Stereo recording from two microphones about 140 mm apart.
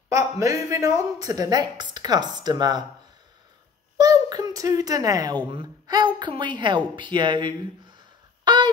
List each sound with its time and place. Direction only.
0.1 s speech: 20° right (ahead or behind)
4.0 s a sound: 25° right (ahead or behind)
5.5 s a woman's voice: 35° right (ahead or behind)
8.5 s fowl: 30° right (ahead or behind)